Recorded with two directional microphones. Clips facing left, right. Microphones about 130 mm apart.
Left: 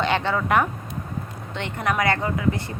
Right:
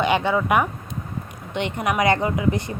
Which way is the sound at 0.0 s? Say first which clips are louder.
Right 3 dB; 15° right (ahead or behind).